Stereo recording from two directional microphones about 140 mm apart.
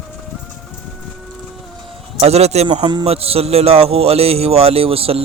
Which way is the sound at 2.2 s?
50° right (ahead or behind).